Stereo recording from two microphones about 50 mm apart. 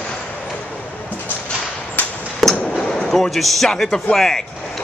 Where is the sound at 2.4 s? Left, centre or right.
Centre.